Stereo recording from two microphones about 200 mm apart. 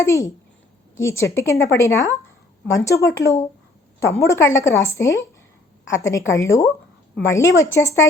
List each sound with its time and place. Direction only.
0.0 s a woman's voice: 15° left (ahead or behind)